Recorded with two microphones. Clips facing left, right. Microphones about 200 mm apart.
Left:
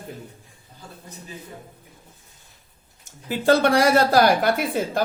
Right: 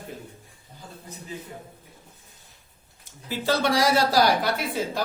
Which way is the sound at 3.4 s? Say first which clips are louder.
Left 5 dB; 55° left (ahead or behind).